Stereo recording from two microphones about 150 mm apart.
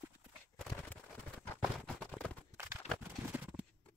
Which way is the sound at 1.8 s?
5° left (ahead or behind).